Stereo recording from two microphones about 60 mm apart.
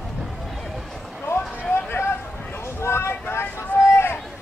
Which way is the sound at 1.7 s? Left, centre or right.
Left.